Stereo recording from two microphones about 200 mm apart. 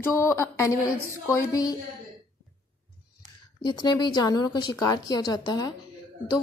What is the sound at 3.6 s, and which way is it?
A woman's voice, 20° left (ahead or behind).